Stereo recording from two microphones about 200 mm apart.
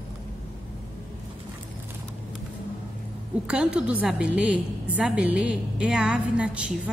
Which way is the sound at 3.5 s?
5° right (ahead or behind).